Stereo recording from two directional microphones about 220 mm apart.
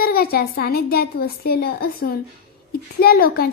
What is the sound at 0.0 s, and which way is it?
A child's voice, 45° left (ahead or behind).